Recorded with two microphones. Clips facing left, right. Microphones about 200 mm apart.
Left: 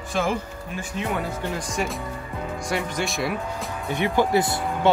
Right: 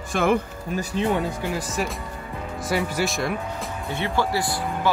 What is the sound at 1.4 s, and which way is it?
Speech, 5° right (ahead or behind).